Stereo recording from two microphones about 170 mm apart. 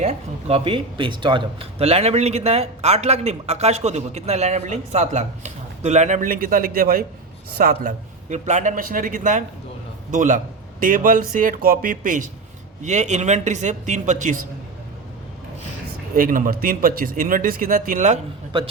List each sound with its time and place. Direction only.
0.0 s speech: 40° right (ahead or behind)
16.1 s speech: 55° right (ahead or behind)